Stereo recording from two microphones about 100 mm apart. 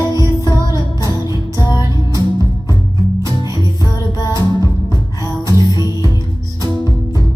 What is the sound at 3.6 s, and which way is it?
Music, 45° left (ahead or behind).